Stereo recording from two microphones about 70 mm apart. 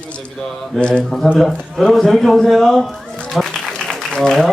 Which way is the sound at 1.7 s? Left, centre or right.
Centre.